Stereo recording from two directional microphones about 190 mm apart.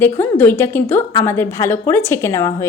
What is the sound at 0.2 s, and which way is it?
A woman's voice, 10° left (ahead or behind).